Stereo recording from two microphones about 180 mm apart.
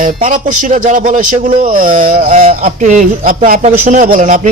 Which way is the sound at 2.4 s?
35° right (ahead or behind).